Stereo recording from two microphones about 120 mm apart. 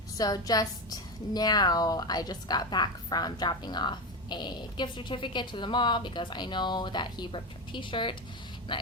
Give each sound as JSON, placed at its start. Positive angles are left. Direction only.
{"t": 0.2, "sound": "a woman's voice", "side_deg": 30}